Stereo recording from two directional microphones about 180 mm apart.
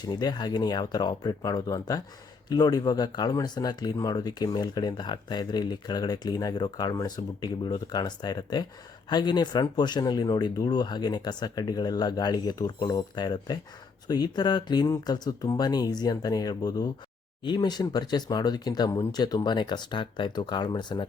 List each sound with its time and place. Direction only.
0.0 s speech: 25° left (ahead or behind)